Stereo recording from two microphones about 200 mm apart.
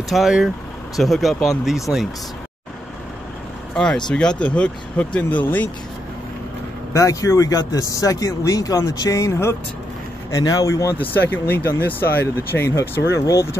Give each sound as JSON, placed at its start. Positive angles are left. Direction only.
{"t": 0.1, "sound": "speech", "side_deg": 0}
{"t": 3.7, "sound": "speech", "side_deg": 5}
{"t": 6.9, "sound": "speech", "side_deg": 15}